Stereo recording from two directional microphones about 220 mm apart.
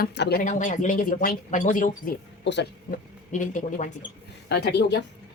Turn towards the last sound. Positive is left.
turn(degrees=50)  # may be behind; listen again after turning